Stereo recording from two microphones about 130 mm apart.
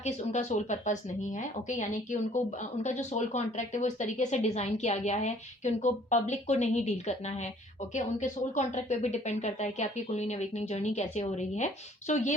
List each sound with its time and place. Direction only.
0.0 s a woman's voice: 65° left (ahead or behind)